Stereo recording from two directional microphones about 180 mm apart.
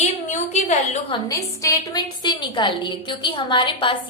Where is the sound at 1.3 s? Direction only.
20° left (ahead or behind).